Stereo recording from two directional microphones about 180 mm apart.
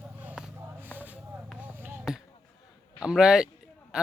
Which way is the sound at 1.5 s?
10° right (ahead or behind).